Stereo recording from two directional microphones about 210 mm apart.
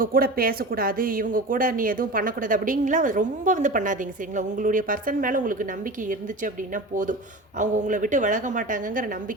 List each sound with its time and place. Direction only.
0.0 s speech: 45° right (ahead or behind)